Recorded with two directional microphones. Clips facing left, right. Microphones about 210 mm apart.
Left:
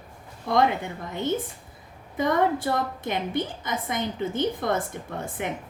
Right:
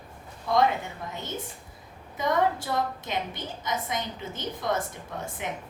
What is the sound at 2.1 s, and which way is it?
A woman's voice, 55° left (ahead or behind).